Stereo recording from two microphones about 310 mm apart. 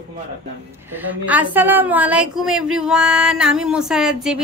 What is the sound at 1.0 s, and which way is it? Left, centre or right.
A woman's voice, centre.